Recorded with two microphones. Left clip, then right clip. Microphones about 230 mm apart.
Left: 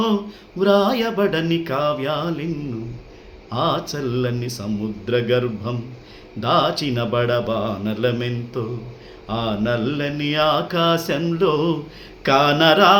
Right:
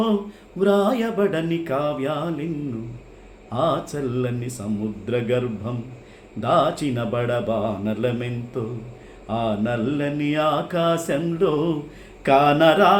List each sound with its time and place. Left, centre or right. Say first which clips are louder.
0.6 s mantra: left 2 dB; centre
3.5 s mantra: left 1 dB; centre